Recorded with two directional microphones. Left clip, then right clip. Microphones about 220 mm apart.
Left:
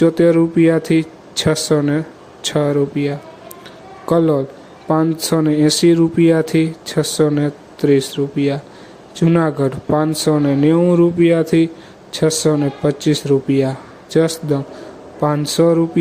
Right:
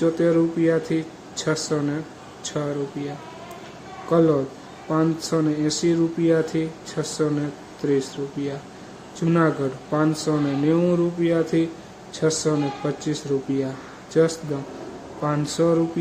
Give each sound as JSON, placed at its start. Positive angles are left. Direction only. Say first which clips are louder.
{"t": 0.0, "sound": "speech", "louder": "left 7 dB", "side_deg": 35}
{"t": 4.1, "sound": "speech", "louder": "left 4 dB", "side_deg": 35}